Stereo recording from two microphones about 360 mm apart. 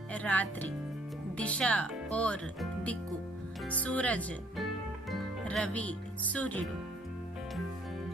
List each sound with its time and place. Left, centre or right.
0.1 s speech: centre